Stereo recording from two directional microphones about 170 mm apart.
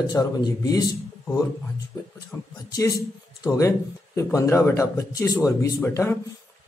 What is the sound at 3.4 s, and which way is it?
Speech, 20° left (ahead or behind).